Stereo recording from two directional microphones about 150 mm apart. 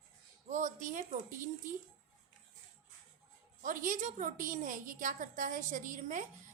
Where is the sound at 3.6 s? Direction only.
60° right (ahead or behind).